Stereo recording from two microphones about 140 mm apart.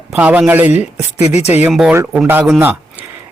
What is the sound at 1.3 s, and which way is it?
Speech, 50° left (ahead or behind).